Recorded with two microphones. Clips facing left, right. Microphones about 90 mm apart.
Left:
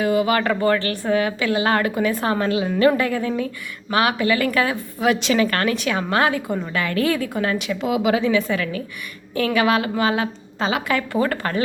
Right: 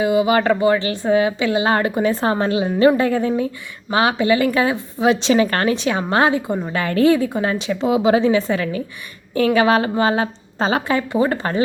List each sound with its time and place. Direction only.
0.0 s a woman's voice: 20° right (ahead or behind); by 10.9 s 35° right (ahead or behind)
10.9 s a woman's voice: 25° right (ahead or behind)